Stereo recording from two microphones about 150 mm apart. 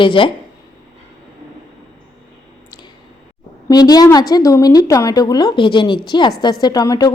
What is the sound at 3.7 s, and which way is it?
A woman's voice, 25° left (ahead or behind).